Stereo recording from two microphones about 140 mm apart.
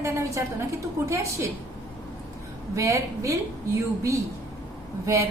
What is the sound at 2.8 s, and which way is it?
Speech, 20° right (ahead or behind).